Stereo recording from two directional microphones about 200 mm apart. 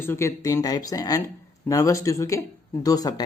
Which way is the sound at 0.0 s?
10° left (ahead or behind).